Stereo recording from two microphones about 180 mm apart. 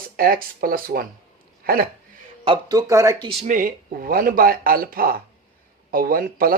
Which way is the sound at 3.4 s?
50° right (ahead or behind).